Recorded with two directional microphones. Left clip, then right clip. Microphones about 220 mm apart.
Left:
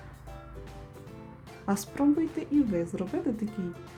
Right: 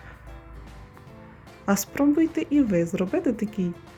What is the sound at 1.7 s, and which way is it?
Speech, 10° right (ahead or behind).